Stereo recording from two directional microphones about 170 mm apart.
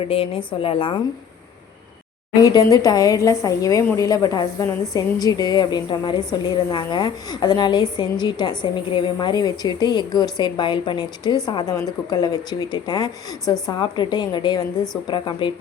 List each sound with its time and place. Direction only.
0.1 s a woman's voice: 35° left (ahead or behind)
2.4 s a woman's voice: 20° left (ahead or behind)